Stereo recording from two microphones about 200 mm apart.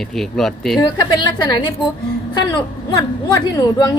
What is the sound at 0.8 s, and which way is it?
A woman's voice, 20° left (ahead or behind).